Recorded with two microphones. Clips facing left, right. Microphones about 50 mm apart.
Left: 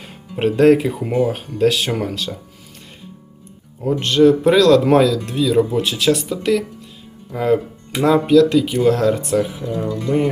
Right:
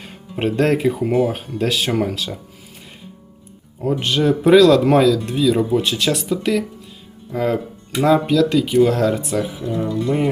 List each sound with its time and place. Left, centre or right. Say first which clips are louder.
0.0 s speech: left 2 dB; centre
4.0 s speech: left 5 dB; centre
9.6 s speech: right 1 dB; right